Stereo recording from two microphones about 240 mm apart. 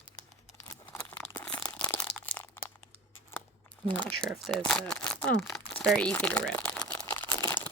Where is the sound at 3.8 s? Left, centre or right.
Right.